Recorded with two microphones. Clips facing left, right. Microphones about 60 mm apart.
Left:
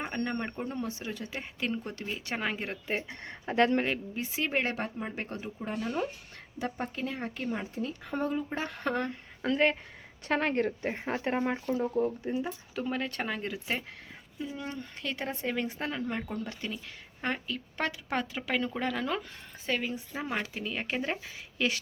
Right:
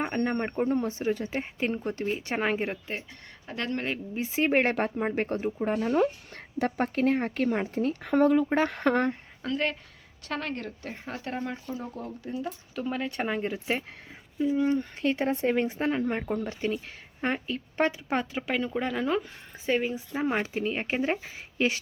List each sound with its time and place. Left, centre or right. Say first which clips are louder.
0.0 s speech: right 5 dB; right
3.1 s speech: left 5 dB; left
4.1 s speech: right 6 dB; centre
4.4 s speech: right 7 dB; right
6.0 s speech: right 8 dB; right
6.7 s speech: right 10 dB; right
9.4 s speech: left 1 dB; centre
10.2 s speech: left 5 dB; left
12.7 s speech: right 1 dB; centre
13.1 s speech: right 5 dB; centre
18.5 s speech: right 2 dB; centre; by 21.8 s right